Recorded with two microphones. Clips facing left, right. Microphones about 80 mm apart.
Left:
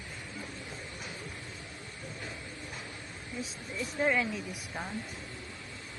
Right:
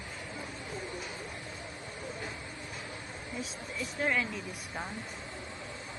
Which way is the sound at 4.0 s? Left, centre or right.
Centre.